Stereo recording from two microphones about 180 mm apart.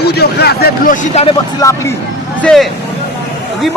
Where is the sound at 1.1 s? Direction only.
35° left (ahead or behind).